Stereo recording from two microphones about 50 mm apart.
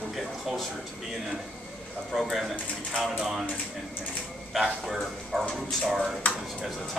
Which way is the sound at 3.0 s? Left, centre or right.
Centre.